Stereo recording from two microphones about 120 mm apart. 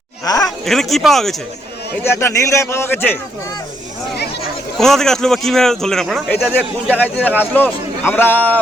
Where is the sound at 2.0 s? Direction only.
20° left (ahead or behind).